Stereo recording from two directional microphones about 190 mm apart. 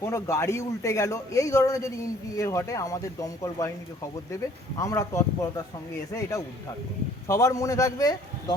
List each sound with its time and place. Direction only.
0.0 s a man's voice: 15° left (ahead or behind)
4.8 s a man's voice: 15° left (ahead or behind)
7.3 s a man's voice: 15° left (ahead or behind)